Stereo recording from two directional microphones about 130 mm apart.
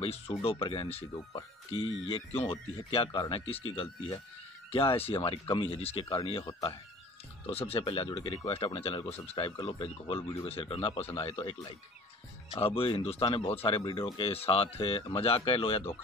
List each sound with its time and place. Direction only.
0.4 s speech: 45° left (ahead or behind)
13.7 s speech: 35° left (ahead or behind)